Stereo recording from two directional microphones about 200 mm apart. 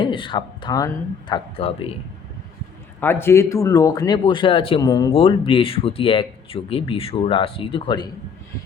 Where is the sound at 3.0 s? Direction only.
10° left (ahead or behind).